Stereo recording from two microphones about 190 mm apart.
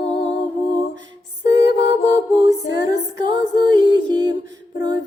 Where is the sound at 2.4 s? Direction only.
20° right (ahead or behind).